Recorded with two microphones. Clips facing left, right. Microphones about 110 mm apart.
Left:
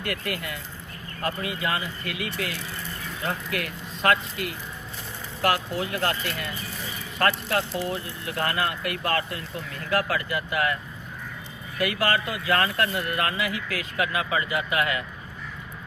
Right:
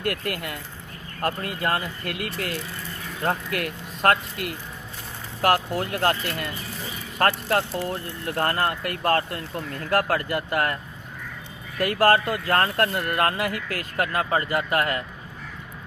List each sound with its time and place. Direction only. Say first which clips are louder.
0.0 s speech: right 3 dB; 50° right (ahead or behind)
11.8 s speech: right 6 dB; 45° right (ahead or behind)